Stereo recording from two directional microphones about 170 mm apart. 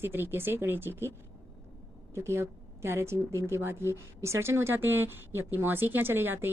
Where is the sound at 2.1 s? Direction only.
15° right (ahead or behind).